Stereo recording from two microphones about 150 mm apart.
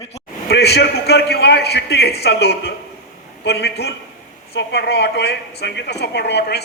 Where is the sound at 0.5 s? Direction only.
90° left.